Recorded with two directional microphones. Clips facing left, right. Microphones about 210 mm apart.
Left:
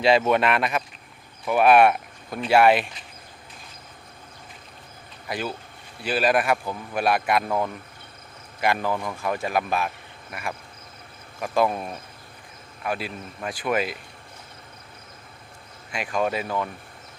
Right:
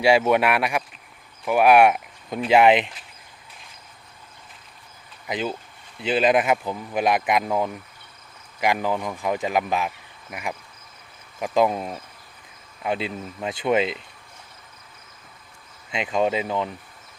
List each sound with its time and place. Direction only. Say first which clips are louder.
0.0 s speech: right 1 dB; 10° right (ahead or behind)
5.3 s speech: right 3 dB; 20° right (ahead or behind)
11.3 s speech: right 2 dB; 15° right (ahead or behind)
15.9 s speech: right 3 dB; 20° right (ahead or behind)